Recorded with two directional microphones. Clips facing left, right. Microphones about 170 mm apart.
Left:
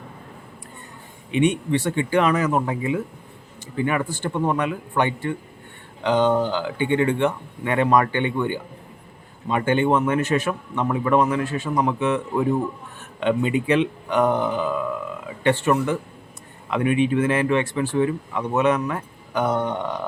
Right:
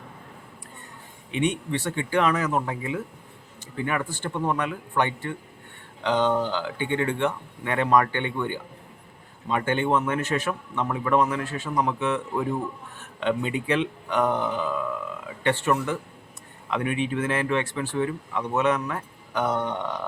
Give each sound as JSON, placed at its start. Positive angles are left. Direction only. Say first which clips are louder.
{"t": 1.3, "sound": "a man's voice", "louder": "left 6 dB", "side_deg": 15}